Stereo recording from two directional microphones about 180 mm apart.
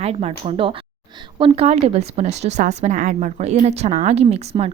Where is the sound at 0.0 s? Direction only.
35° right (ahead or behind).